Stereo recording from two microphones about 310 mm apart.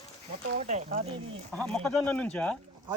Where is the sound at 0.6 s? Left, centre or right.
Right.